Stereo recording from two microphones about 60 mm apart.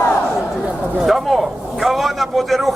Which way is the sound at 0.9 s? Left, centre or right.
Centre.